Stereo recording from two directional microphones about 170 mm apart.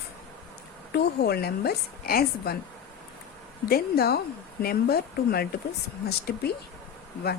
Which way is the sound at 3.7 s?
65° left (ahead or behind).